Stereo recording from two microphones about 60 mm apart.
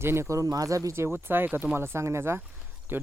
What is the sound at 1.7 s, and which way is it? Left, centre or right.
Speech, right.